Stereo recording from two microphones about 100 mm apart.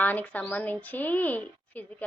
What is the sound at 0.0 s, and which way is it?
A woman's voice, 15° left (ahead or behind).